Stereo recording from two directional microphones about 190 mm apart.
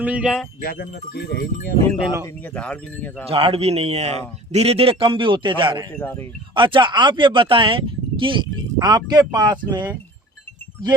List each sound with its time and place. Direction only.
0.0 s speech: 5° right (ahead or behind)
0.6 s speech: 50° left (ahead or behind)
2.2 s speech: 5° left (ahead or behind)
3.2 s a man's voice: 30° right (ahead or behind)
6.0 s speech: 10° left (ahead or behind)
6.5 s speech: 25° right (ahead or behind)